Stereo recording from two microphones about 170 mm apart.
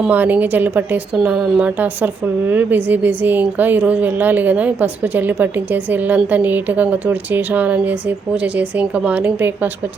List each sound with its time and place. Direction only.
0.0 s a woman's voice: 10° right (ahead or behind)